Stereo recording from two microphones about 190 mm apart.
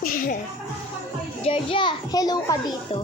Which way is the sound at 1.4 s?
30° left (ahead or behind).